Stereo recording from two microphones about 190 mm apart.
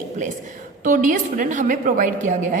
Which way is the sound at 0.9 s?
45° right (ahead or behind).